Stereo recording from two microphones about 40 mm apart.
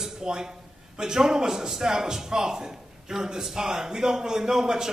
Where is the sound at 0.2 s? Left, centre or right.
Centre.